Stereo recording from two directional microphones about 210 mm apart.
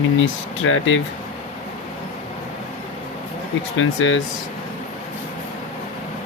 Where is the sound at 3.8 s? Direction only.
65° left (ahead or behind).